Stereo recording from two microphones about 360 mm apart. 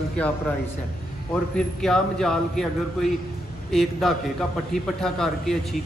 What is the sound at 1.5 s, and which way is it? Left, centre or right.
A man's voice, centre.